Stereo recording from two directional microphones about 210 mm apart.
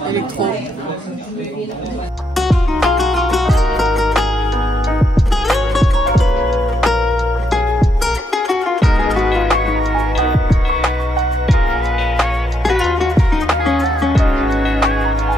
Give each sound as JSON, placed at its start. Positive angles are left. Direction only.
{"t": 2.3, "sound": "music", "side_deg": 0}